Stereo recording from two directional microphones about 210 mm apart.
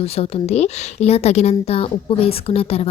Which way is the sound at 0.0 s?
30° left (ahead or behind).